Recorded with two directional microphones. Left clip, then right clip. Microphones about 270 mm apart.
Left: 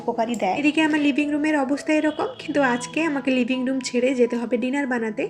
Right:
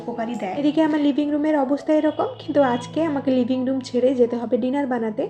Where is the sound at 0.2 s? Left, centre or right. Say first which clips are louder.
Left 1 dB; centre.